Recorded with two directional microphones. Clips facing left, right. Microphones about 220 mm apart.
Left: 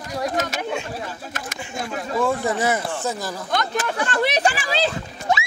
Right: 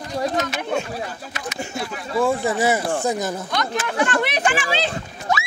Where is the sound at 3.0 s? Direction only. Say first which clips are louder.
Right 4 dB; 15° right (ahead or behind).